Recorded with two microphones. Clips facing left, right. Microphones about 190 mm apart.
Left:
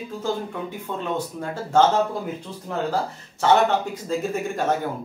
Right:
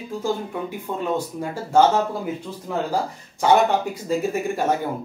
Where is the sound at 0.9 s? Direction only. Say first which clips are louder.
Right 3 dB; 10° right (ahead or behind).